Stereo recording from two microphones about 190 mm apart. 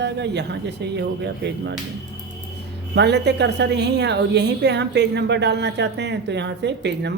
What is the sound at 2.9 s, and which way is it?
A woman's voice, 65° right (ahead or behind).